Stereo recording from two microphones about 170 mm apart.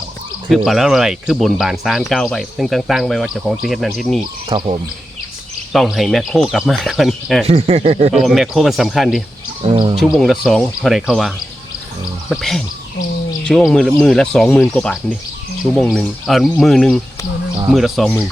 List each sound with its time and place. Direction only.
0.4 s speech: centre (ahead or behind)
4.4 s speech: 30° right (ahead or behind)
5.7 s speech: centre (ahead or behind)
7.4 s speech: 40° right (ahead or behind)
8.1 s speech: centre (ahead or behind)
9.6 s speech: 30° right (ahead or behind)
10.0 s speech: centre (ahead or behind)